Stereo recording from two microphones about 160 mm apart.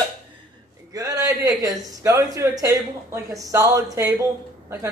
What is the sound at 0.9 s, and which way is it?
A man's voice, 20° right (ahead or behind).